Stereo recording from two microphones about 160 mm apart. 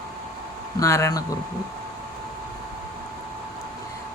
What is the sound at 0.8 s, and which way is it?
Speech, 20° left (ahead or behind).